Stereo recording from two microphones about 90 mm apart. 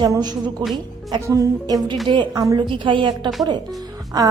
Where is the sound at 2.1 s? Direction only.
60° right (ahead or behind).